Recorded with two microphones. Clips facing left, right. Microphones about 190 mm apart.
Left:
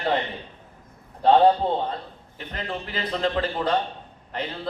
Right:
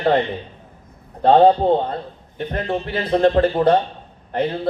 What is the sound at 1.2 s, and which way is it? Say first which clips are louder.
A man's voice: right 5 dB; 50° right (ahead or behind).